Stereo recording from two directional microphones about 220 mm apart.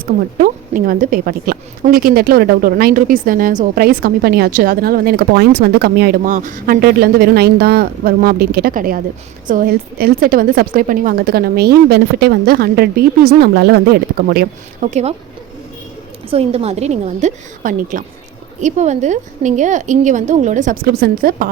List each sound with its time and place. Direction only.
0.0 s speech: 40° right (ahead or behind)
16.3 s a woman's voice: 25° right (ahead or behind)